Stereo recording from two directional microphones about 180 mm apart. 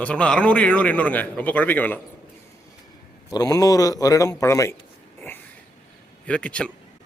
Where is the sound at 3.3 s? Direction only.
20° left (ahead or behind).